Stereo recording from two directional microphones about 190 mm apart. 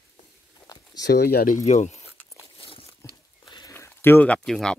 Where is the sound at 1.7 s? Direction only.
35° left (ahead or behind).